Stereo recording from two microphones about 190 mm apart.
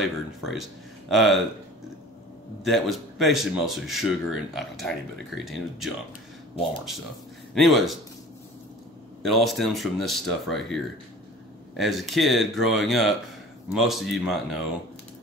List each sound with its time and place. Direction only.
0.0 s speech: centre (ahead or behind)
2.6 s speech: centre (ahead or behind)
7.5 s speech: centre (ahead or behind)
9.2 s speech: centre (ahead or behind)